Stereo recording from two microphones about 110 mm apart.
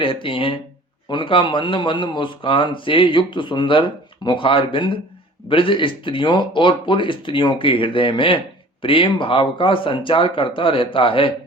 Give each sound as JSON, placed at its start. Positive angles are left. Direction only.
{"t": 0.0, "sound": "a man's voice", "side_deg": 50}